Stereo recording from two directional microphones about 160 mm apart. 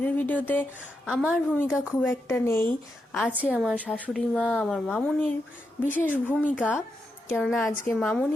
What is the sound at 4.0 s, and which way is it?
A woman's voice, 5° left (ahead or behind).